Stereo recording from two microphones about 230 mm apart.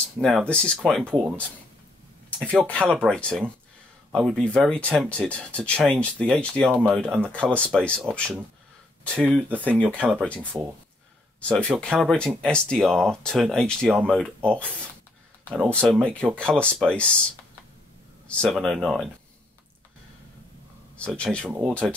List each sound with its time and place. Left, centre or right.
0.2 s speech: centre
2.4 s speech: centre
9.2 s speech: centre
18.3 s speech: centre
21.0 s speech: centre